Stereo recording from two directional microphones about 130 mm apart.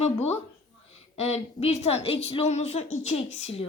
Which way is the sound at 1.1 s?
55° left (ahead or behind).